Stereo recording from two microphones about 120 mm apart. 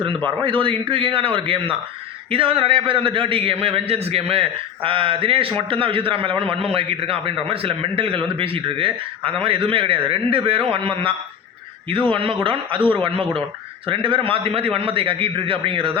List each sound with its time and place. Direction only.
0.4 s a man's voice: 45° right (ahead or behind)